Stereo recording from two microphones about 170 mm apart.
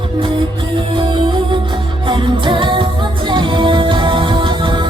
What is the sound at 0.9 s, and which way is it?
Music, 30° right (ahead or behind).